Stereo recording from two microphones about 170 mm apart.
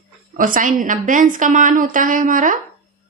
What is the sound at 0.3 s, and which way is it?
A woman's voice, 55° right (ahead or behind).